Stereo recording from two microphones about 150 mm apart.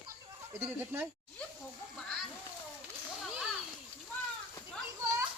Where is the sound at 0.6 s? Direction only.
10° right (ahead or behind).